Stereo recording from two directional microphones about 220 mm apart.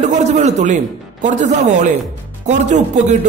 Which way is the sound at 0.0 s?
30° right (ahead or behind).